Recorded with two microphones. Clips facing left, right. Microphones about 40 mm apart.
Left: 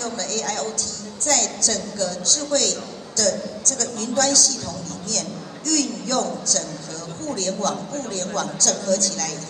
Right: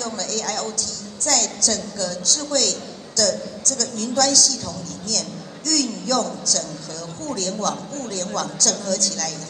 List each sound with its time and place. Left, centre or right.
0.0 s a woman's voice: left
5.7 s a woman's voice: left